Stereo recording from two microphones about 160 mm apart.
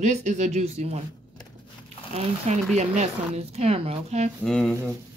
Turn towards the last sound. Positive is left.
turn(degrees=5)  # may be behind; listen again after turning